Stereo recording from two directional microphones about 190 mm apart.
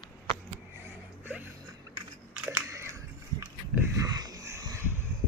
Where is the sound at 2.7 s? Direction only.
15° right (ahead or behind).